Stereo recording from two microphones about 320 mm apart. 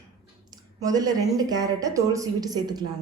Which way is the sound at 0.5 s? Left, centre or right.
Centre.